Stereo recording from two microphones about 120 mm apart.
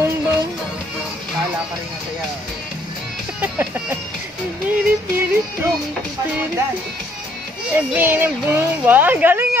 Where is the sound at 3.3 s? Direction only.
15° right (ahead or behind).